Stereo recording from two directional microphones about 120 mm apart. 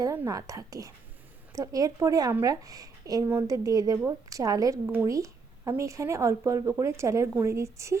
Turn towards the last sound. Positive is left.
turn(degrees=-25)  # may be behind; listen again after turning